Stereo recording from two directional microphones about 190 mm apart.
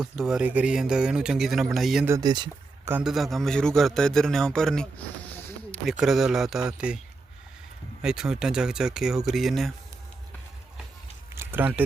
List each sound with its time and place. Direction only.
0.0 s a man's voice: 5° right (ahead or behind)
2.0 s speech: 20° right (ahead or behind)
2.9 s a man's voice: 5° right (ahead or behind)
5.8 s a man's voice: centre (ahead or behind)
8.0 s a man's voice: 5° right (ahead or behind)
11.3 s a sound: 10° right (ahead or behind)